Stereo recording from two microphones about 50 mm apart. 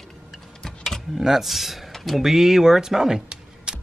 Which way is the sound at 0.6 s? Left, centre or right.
Centre.